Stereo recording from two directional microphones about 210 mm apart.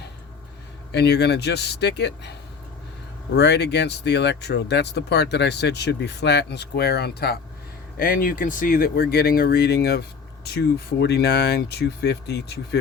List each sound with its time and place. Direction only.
0.9 s speech: 55° left (ahead or behind)
3.3 s speech: 55° left (ahead or behind)